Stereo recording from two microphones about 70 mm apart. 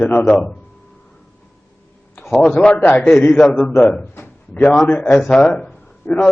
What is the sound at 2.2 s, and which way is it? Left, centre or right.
Speech, centre.